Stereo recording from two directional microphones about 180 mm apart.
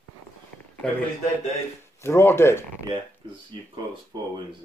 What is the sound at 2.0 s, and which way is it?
Speech, 15° left (ahead or behind).